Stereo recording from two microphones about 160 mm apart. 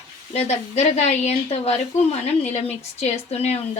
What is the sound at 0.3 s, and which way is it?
A woman's voice, 45° left (ahead or behind).